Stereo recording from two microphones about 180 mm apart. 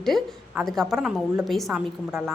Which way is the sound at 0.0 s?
Centre (ahead or behind).